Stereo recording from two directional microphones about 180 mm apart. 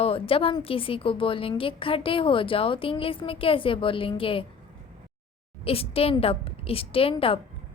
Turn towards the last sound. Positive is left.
turn(degrees=30)  # may be behind; listen again after turning